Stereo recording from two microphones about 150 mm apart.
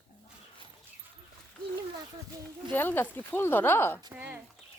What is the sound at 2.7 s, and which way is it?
Speech, 15° left (ahead or behind).